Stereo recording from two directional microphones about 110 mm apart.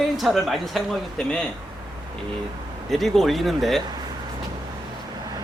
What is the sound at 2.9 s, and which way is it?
Speech, centre (ahead or behind).